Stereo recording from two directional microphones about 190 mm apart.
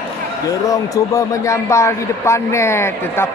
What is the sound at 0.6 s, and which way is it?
A man's voice, 15° left (ahead or behind).